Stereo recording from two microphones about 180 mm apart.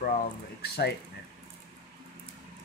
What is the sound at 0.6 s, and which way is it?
Speech, 65° left (ahead or behind).